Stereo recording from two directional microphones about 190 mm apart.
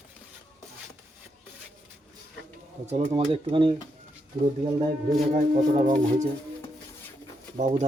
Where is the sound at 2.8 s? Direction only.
35° right (ahead or behind).